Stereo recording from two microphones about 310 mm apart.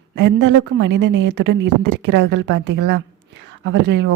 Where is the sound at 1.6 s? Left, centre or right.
Right.